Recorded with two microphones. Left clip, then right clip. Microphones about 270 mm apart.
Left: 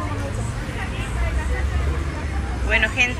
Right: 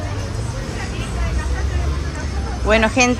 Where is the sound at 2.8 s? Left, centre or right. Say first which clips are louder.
Right 1 dB; right.